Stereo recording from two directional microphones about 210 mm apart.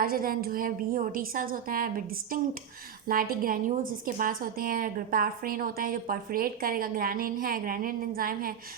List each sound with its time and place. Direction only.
0.0 s a woman's voice: 45° right (ahead or behind)